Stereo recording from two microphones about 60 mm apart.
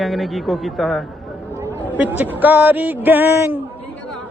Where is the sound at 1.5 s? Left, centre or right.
Right.